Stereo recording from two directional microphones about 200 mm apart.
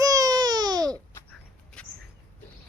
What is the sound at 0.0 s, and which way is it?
Baby cry, 15° right (ahead or behind).